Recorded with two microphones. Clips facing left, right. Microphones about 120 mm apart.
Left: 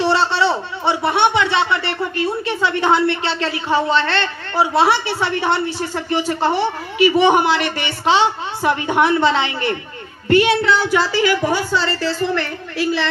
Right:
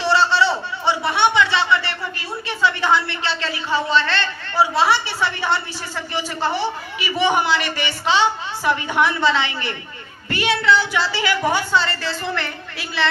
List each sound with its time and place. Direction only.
0.0 s a man's voice: 55° left (ahead or behind); by 13.1 s 40° left (ahead or behind)